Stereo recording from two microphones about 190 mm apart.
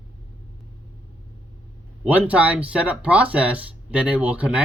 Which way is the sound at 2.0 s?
10° right (ahead or behind).